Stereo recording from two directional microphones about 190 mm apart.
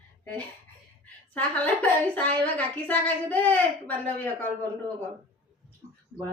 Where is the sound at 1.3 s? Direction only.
10° left (ahead or behind).